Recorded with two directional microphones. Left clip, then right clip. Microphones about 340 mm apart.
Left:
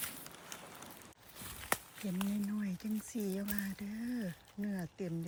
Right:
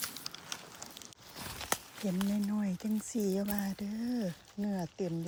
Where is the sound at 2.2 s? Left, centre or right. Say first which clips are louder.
Right 3 dB; centre.